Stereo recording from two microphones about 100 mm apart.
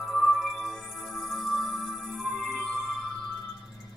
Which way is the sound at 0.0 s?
Centre (ahead or behind).